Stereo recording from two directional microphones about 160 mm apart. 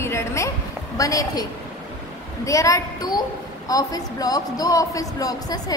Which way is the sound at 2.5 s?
20° left (ahead or behind).